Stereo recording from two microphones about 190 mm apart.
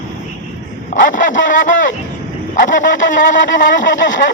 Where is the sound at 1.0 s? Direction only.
40° left (ahead or behind).